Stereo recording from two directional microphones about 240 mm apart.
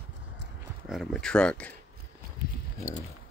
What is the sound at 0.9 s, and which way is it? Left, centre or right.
Speech, centre.